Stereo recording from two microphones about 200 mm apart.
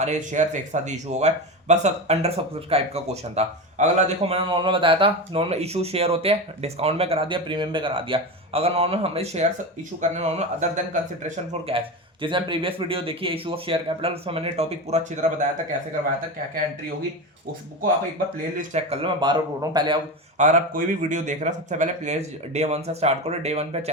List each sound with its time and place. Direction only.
0.0 s a man's voice: 35° right (ahead or behind)
18.7 s a man's voice: 30° right (ahead or behind)
20.4 s speech: 40° right (ahead or behind)